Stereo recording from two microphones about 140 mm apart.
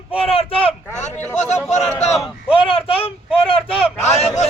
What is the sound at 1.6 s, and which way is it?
Speech, 5° left (ahead or behind).